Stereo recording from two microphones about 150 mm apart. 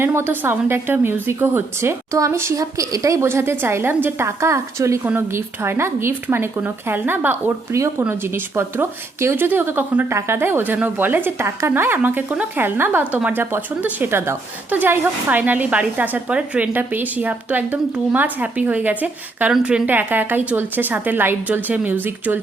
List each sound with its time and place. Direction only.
0.0 s speech: 15° right (ahead or behind)